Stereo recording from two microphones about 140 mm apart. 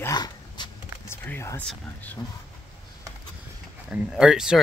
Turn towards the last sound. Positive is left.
turn(degrees=-5)  # may be behind; listen again after turning